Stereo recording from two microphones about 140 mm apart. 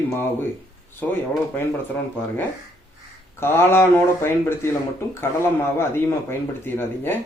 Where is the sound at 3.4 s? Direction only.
15° left (ahead or behind).